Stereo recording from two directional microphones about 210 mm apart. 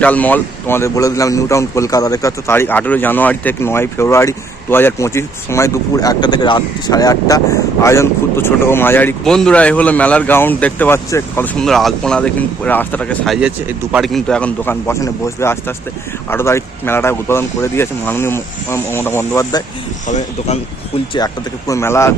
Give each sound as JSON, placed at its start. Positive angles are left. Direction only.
{"t": 0.0, "sound": "a man's voice", "side_deg": 5}
{"t": 20.1, "sound": "speech", "side_deg": 35}
{"t": 21.7, "sound": "a man's voice", "side_deg": 15}